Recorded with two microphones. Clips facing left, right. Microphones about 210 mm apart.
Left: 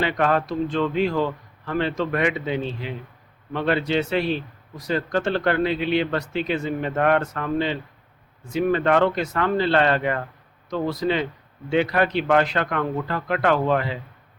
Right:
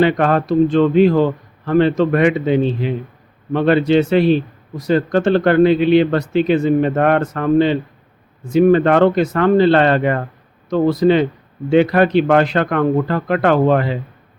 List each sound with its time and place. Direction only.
0.0 s speech: 50° right (ahead or behind)
10.7 s speech: 60° right (ahead or behind)